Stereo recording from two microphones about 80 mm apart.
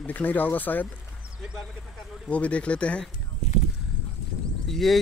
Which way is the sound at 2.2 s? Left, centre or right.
Centre.